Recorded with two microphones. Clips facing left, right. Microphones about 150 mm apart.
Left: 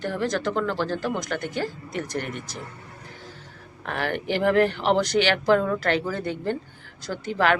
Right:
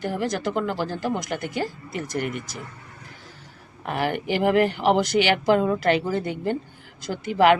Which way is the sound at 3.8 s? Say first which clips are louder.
Right 2 dB; 15° right (ahead or behind).